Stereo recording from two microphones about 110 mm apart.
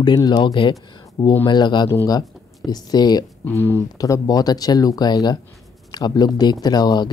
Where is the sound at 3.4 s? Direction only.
25° left (ahead or behind).